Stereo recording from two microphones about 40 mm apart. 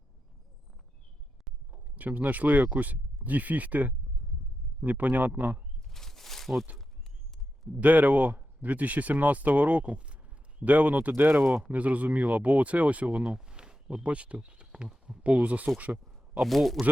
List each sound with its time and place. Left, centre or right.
2.0 s speech: right
5.9 s a sound: centre
7.7 s speech: right
11.2 s speech: right
11.6 s speech: right; by 14.0 s centre
14.0 s speech: right
14.8 s speech: centre
15.2 s speech: right
16.0 s speech: centre